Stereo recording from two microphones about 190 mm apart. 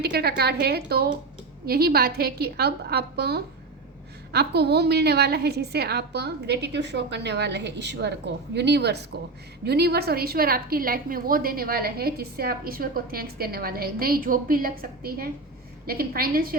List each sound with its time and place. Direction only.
0.0 s a woman's voice: 55° right (ahead or behind)